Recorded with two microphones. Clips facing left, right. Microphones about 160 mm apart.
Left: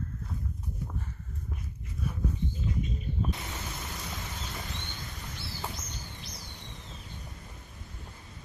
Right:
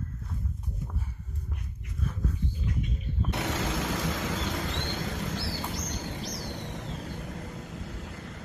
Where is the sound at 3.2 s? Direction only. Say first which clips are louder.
Right 7 dB; 80° right.